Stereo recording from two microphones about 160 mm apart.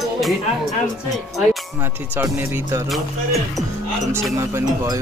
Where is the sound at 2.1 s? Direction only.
15° right (ahead or behind).